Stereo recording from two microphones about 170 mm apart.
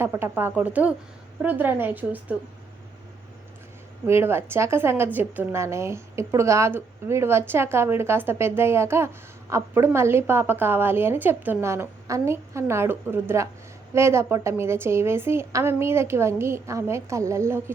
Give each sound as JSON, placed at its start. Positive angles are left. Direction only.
{"t": 0.0, "sound": "a woman's voice", "side_deg": -15}
{"t": 4.0, "sound": "a woman's voice", "side_deg": -15}